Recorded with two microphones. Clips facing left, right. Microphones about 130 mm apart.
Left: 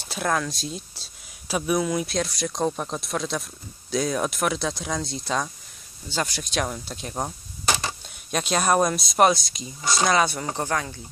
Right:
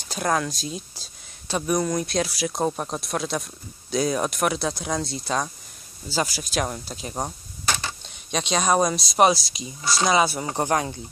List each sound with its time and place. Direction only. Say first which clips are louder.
0.1 s speech: right 1 dB; centre (ahead or behind)
10.6 s speech: right 5 dB; 20° right (ahead or behind)